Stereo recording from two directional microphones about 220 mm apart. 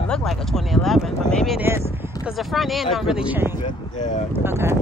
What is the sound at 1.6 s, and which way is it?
Speech, 10° right (ahead or behind).